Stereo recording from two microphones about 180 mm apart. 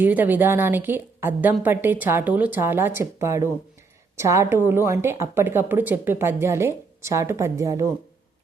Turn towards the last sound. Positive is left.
turn(degrees=-15)  # may be behind; listen again after turning